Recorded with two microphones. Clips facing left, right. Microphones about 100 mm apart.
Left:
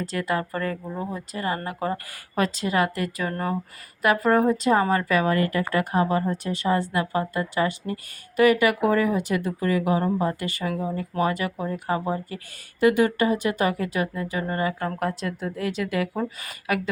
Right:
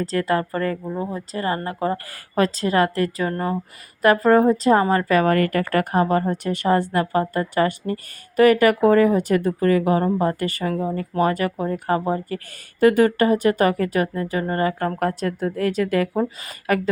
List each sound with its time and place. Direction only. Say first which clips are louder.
0.0 s a woman's voice: right 5 dB; 35° right (ahead or behind)
0.9 s speech: right 4 dB; 20° right (ahead or behind)
1.3 s a woman's voice: right 4 dB; 35° right (ahead or behind)
4.0 s a woman's voice: right 5 dB; 35° right (ahead or behind)
5.2 s a woman's voice: right 4 dB; 60° right (ahead or behind); by 16.9 s 40° right (ahead or behind)